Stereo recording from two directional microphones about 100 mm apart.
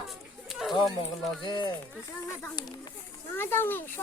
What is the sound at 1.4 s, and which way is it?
Speech, 50° left (ahead or behind).